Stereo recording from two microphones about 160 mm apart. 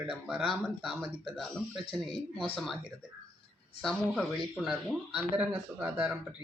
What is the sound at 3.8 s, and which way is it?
Speech, 5° left (ahead or behind).